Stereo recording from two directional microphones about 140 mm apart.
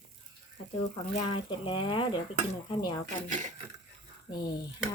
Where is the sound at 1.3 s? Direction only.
35° left (ahead or behind).